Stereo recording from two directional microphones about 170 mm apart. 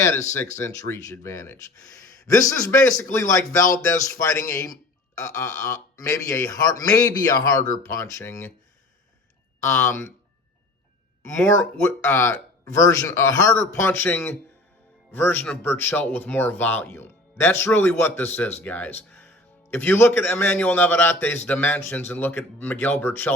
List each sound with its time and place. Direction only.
0.6 s speech: 15° left (ahead or behind)
9.6 s speech: 15° left (ahead or behind)
11.2 s speech: 15° left (ahead or behind)